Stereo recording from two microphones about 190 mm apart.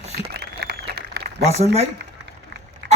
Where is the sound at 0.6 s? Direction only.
55° right (ahead or behind).